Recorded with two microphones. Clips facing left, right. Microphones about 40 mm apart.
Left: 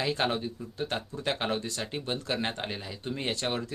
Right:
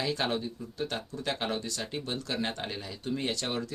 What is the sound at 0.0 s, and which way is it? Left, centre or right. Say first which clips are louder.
Speech: left 2 dB; left.